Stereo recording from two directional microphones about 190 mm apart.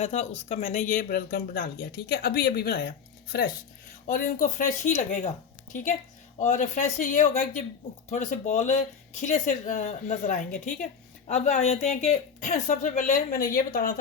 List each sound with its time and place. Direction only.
0.0 s speech: 35° left (ahead or behind); by 2.9 s 55° left (ahead or behind)
4.0 s speech: 45° left (ahead or behind)
6.4 s speech: 40° left (ahead or behind)